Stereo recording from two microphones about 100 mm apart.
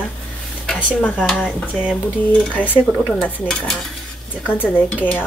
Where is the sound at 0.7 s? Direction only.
10° left (ahead or behind).